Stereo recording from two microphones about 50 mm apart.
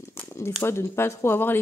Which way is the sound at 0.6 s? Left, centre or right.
Left.